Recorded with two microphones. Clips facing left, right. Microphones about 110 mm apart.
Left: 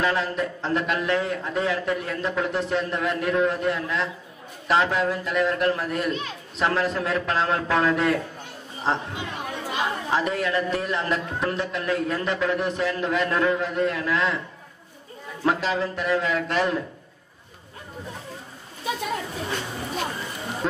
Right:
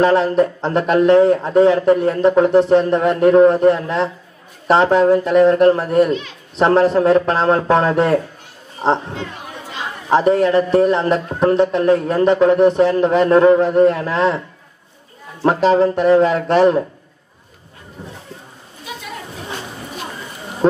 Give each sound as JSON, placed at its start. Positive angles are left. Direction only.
{"t": 0.0, "sound": "a man's voice", "side_deg": -35}
{"t": 9.1, "sound": "chatter", "side_deg": 15}
{"t": 10.0, "sound": "a man's voice", "side_deg": -40}
{"t": 15.4, "sound": "a man's voice", "side_deg": -35}